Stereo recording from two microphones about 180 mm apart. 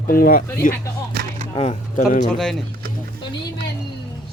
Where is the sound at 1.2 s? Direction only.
65° right (ahead or behind).